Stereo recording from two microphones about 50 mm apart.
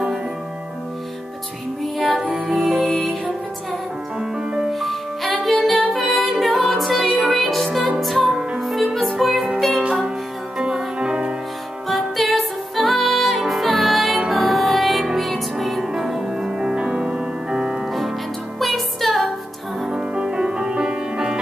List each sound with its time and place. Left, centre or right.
2.0 s music: centre
4.2 s music: centre
4.7 s music: centre
9.8 s music: centre
11.9 s music: centre
18.6 s music: centre
19.8 s music: centre